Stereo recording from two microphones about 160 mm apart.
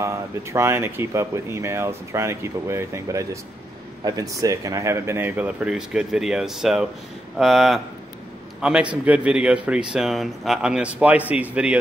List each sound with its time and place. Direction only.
0.0 s a man's voice: 20° right (ahead or behind)